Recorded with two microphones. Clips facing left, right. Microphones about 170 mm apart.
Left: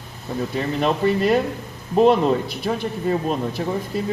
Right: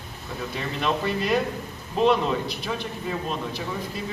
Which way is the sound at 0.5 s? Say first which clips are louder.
Left 5 dB; 40° left (ahead or behind).